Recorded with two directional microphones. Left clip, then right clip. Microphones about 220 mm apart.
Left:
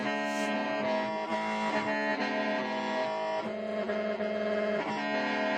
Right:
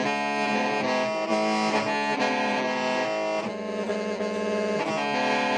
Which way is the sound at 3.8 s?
55° right (ahead or behind).